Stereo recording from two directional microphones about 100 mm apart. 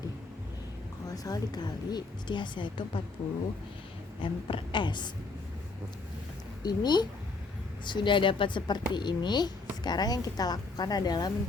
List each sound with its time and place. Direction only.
1.1 s a woman's voice: 40° left (ahead or behind); by 3.0 s 55° left (ahead or behind)
4.2 s a woman's voice: 60° left (ahead or behind)
6.6 s a woman's voice: 45° left (ahead or behind)